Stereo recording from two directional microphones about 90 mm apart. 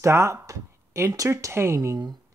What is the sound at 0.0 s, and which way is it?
Speech, 30° right (ahead or behind).